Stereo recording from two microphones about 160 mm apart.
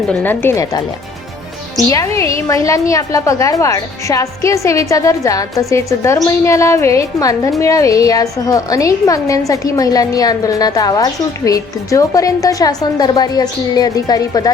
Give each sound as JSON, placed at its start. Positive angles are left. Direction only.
{"t": 0.1, "sound": "speech", "side_deg": 10}
{"t": 1.9, "sound": "a woman's voice", "side_deg": 20}